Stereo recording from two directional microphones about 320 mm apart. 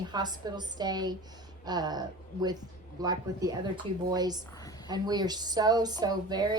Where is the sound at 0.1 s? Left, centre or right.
Centre.